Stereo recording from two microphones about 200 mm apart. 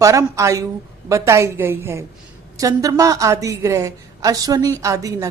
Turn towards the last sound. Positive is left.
turn(degrees=-15)  # may be behind; listen again after turning